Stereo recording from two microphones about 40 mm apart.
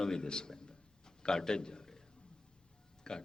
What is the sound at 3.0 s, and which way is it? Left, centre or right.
Speech, centre.